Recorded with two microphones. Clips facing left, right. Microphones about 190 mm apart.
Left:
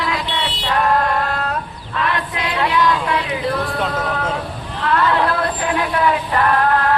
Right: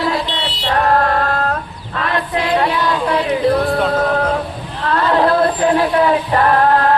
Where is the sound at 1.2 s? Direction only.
40° right (ahead or behind).